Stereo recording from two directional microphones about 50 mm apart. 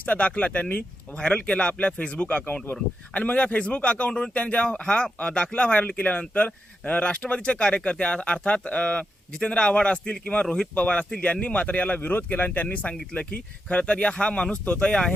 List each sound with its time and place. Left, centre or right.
0.0 s speech: left